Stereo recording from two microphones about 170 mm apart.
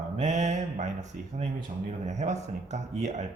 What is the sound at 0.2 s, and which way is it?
Speech, 45° right (ahead or behind).